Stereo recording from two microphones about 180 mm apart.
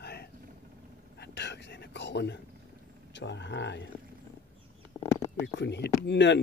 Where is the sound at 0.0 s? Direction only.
65° left (ahead or behind).